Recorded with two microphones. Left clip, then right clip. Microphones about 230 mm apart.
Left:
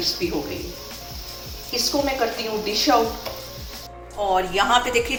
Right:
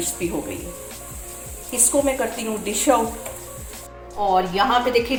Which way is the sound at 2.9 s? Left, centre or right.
Right.